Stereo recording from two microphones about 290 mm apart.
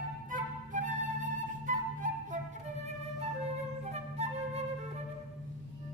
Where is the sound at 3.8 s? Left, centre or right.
Right.